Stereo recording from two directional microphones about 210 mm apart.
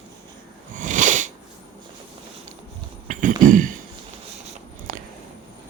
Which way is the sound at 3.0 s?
40° right (ahead or behind).